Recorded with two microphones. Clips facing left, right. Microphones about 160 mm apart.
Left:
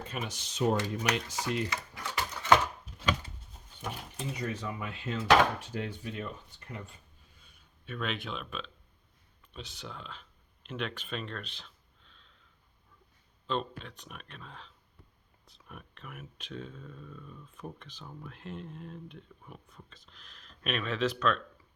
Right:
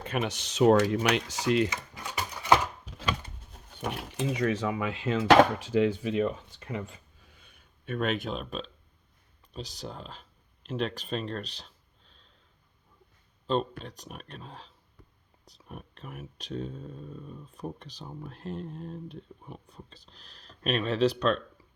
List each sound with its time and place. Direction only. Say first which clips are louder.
0.0 s speech: right 7 dB; 65° right (ahead or behind); by 1.7 s 85° right
1.7 s a sound: even; 15° right (ahead or behind)
3.5 s speech: right 6 dB; 65° right (ahead or behind); by 12.3 s 35° right (ahead or behind)
13.5 s speech: right 5 dB; 40° right (ahead or behind)